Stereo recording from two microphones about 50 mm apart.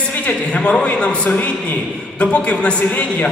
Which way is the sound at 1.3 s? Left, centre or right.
Left.